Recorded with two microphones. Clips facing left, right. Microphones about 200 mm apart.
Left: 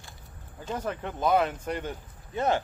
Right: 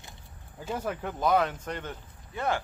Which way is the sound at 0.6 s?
5° right (ahead or behind).